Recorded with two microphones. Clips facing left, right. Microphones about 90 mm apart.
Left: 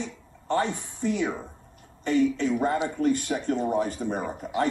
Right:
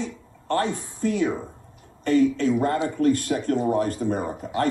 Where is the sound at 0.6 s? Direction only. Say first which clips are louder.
Right 3 dB; 20° left (ahead or behind).